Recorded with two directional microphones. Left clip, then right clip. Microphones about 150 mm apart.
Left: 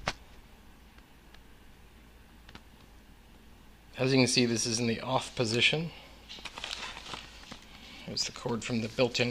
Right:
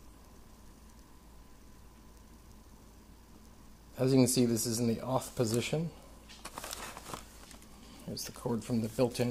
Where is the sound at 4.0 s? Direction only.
20° right (ahead or behind).